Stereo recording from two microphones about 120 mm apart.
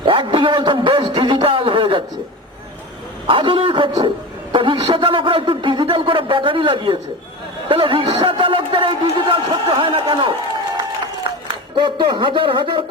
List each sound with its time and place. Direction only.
0.0 s a man's voice: 45° right (ahead or behind)
3.2 s a man's voice: 45° right (ahead or behind)
11.3 s a sound: 50° right (ahead or behind)
11.8 s a man's voice: 45° right (ahead or behind)